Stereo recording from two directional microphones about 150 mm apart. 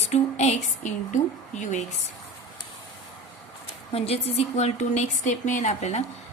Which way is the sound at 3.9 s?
45° left (ahead or behind).